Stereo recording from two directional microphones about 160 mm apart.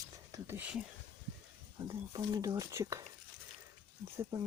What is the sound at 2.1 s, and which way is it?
Speech, 25° right (ahead or behind).